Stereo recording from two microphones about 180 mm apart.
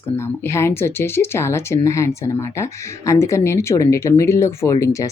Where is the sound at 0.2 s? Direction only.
15° left (ahead or behind).